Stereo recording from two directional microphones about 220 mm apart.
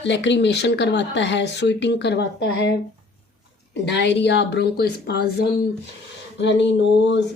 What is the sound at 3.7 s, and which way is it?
A woman's voice, 50° left (ahead or behind).